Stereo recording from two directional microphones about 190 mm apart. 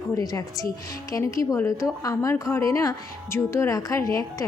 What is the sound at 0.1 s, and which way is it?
A woman's voice, 20° left (ahead or behind).